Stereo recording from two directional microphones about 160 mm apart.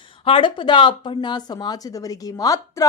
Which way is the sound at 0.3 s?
30° left (ahead or behind).